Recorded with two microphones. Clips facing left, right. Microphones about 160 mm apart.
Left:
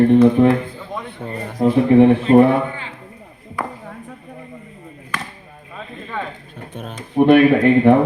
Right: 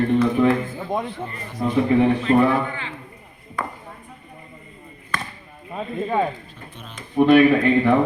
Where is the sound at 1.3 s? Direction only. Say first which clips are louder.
Left 13 dB; 45° left (ahead or behind).